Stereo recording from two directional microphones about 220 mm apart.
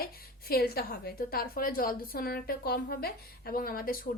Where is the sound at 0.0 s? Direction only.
45° left (ahead or behind).